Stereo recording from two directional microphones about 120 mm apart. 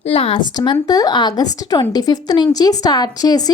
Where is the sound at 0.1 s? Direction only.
50° left (ahead or behind).